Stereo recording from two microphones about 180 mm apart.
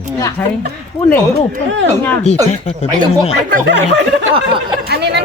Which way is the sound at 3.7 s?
85° right.